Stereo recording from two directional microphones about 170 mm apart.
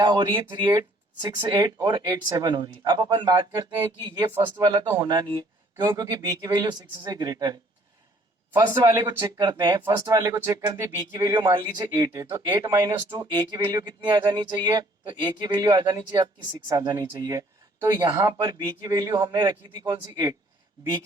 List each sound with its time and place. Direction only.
0.0 s speech: 25° right (ahead or behind)
1.5 s speech: 25° right (ahead or behind)